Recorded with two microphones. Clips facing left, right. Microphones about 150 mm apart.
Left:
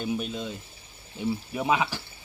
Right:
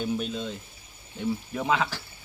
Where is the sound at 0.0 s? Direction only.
5° left (ahead or behind).